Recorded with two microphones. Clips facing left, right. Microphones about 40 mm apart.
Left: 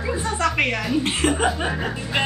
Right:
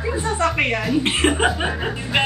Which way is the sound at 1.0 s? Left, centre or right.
Right.